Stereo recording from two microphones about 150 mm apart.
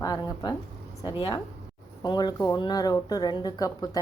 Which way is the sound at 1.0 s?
30° left (ahead or behind).